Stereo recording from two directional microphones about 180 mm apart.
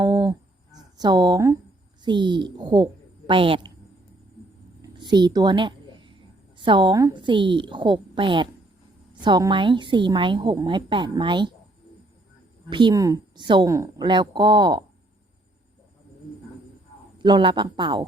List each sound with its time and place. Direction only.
0.0 s a sound: 20° right (ahead or behind)
0.9 s a woman's voice: 25° right (ahead or behind)
4.8 s a sound: 25° right (ahead or behind)
6.6 s a woman's voice: 25° right (ahead or behind)
12.7 s a woman's voice: 25° right (ahead or behind)
17.2 s a woman's voice: 25° right (ahead or behind)